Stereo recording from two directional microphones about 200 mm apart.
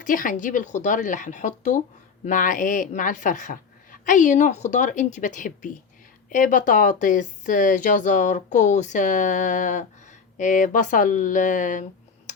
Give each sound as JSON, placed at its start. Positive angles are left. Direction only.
{"t": 0.0, "sound": "speech", "side_deg": 40}